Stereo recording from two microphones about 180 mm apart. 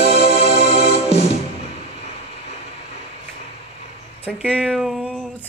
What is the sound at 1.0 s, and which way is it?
Music, 35° left (ahead or behind).